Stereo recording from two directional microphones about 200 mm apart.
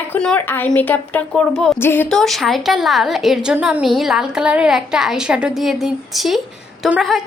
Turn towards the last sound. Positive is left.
turn(degrees=0)  # may be behind; listen again after turning